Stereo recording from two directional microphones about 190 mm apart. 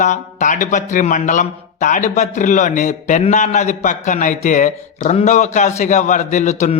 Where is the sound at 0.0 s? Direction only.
40° left (ahead or behind).